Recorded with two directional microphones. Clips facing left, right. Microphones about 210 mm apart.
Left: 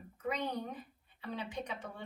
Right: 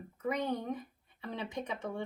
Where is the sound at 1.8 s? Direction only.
50° right (ahead or behind).